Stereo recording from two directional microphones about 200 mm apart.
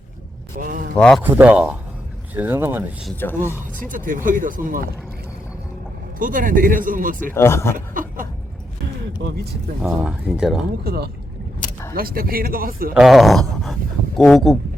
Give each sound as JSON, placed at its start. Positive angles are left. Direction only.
{"t": 0.6, "sound": "speech", "side_deg": -40}
{"t": 0.9, "sound": "speech", "side_deg": 5}
{"t": 1.2, "sound": "speech", "side_deg": -10}
{"t": 3.2, "sound": "speech", "side_deg": 10}
{"t": 3.8, "sound": "speech", "side_deg": -40}
{"t": 6.1, "sound": "speech", "side_deg": -45}
{"t": 7.3, "sound": "speech", "side_deg": 15}
{"t": 7.9, "sound": "a sound", "side_deg": -45}
{"t": 9.8, "sound": "speech", "side_deg": -5}
{"t": 10.8, "sound": "speech", "side_deg": -50}
{"t": 12.9, "sound": "speech", "side_deg": 0}